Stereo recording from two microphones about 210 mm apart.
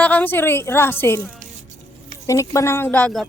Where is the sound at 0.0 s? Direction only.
5° left (ahead or behind).